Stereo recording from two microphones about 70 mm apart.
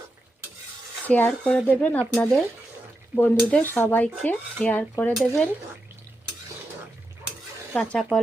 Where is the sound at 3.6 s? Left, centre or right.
Left.